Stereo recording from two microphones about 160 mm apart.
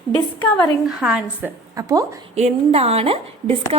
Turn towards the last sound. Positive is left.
turn(degrees=-40)  # may be behind; listen again after turning